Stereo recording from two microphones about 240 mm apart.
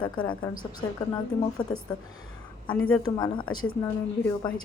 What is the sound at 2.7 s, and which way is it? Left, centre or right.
Speech, centre.